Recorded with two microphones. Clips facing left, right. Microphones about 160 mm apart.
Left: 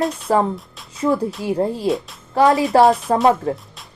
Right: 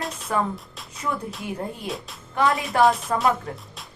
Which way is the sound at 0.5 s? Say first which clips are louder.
Left 4 dB; centre (ahead or behind).